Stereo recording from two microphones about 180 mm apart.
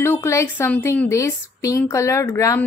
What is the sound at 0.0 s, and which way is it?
A woman's voice, 15° left (ahead or behind).